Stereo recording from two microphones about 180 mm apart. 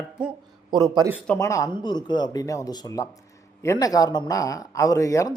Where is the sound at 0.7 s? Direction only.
20° right (ahead or behind).